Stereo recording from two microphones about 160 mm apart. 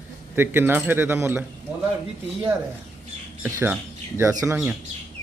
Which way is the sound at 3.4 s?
15° right (ahead or behind).